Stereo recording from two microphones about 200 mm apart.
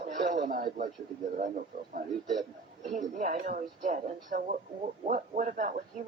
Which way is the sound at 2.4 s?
Centre (ahead or behind).